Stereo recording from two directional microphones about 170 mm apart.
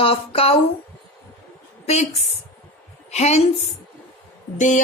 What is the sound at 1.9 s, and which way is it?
A woman's voice, 40° left (ahead or behind).